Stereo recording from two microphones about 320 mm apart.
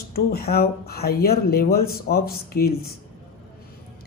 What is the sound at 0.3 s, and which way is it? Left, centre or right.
Speech, left.